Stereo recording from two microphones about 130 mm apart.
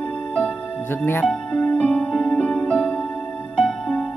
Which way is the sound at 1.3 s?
5° left (ahead or behind).